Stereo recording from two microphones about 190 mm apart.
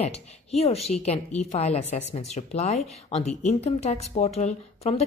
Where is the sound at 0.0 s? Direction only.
35° left (ahead or behind).